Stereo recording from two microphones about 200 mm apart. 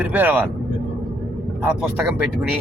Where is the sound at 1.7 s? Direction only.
10° right (ahead or behind).